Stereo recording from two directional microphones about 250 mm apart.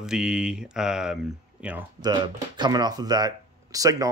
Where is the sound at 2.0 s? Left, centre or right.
Centre.